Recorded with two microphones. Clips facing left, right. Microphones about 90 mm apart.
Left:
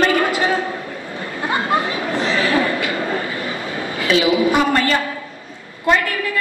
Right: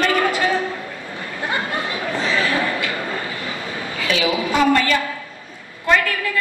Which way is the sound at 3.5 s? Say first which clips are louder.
Left 3 dB; 30° left (ahead or behind).